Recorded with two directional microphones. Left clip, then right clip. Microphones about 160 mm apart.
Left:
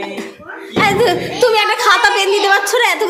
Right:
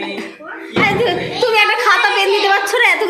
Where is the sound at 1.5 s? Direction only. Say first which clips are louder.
Right 3 dB; 10° left (ahead or behind).